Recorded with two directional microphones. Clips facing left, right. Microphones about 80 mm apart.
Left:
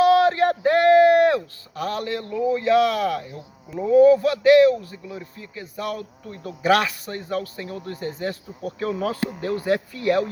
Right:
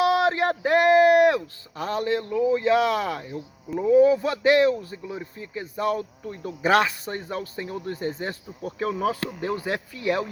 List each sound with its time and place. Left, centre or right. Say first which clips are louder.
0.0 s a sound: left 4 dB; centre
1.7 s speech: right 1 dB; right
8.9 s speech: even; centre
9.4 s speech: left 7 dB; centre